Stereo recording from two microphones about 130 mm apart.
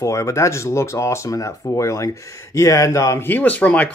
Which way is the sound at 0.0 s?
25° left (ahead or behind).